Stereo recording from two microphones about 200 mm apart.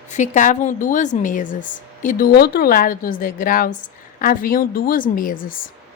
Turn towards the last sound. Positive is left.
turn(degrees=45)  # may be behind; listen again after turning